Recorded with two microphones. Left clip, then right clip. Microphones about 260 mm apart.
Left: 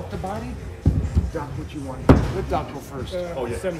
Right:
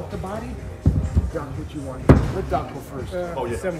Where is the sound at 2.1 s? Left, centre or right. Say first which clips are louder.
Even; centre.